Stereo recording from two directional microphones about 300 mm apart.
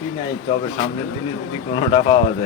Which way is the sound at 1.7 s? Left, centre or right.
Centre.